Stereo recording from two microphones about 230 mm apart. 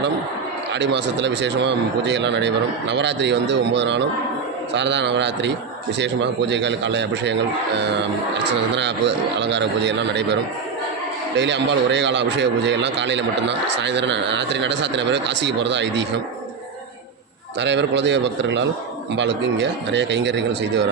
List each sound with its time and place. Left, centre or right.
0.7 s a man's voice: right
8.7 s a man's voice: right
11.3 s a man's voice: right
17.6 s a man's voice: right